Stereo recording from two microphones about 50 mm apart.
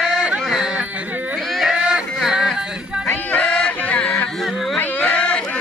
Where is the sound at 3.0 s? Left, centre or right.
Left.